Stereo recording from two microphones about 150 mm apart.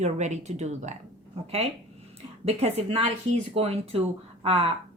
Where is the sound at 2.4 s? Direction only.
45° right (ahead or behind).